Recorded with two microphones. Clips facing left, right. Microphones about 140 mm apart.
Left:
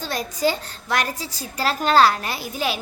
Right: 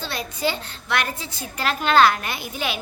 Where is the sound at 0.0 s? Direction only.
40° left (ahead or behind).